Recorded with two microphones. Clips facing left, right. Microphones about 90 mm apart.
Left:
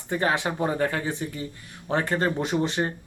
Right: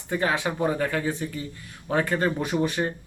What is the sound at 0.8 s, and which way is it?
Speech, 35° left (ahead or behind).